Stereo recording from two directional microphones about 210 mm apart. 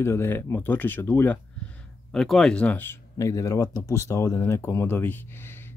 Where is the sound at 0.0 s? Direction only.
10° left (ahead or behind).